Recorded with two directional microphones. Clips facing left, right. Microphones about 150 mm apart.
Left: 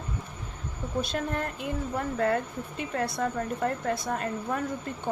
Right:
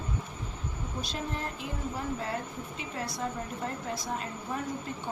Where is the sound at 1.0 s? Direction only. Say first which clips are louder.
Left 6 dB; 55° left (ahead or behind).